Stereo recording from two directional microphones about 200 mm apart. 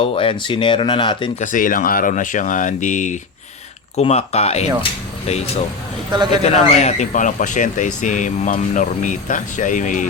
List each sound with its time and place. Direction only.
0.0 s speech: 25° left (ahead or behind)
1.4 s speech: 40° left (ahead or behind)
6.1 s a man's voice: 20° right (ahead or behind)
6.4 s speech: 35° left (ahead or behind)